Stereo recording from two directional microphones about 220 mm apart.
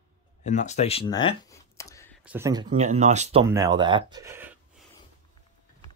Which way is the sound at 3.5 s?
15° right (ahead or behind).